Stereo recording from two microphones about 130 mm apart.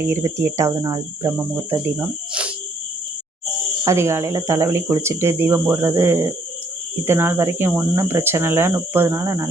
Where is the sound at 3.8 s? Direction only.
20° right (ahead or behind).